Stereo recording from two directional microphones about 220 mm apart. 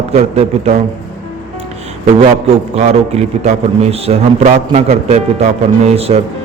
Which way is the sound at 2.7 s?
30° right (ahead or behind).